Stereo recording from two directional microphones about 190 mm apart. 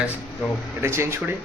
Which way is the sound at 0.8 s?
15° right (ahead or behind).